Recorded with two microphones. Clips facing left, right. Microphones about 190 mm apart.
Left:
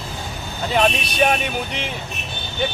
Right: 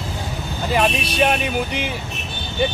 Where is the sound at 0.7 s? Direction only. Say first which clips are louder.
Even; 5° right (ahead or behind).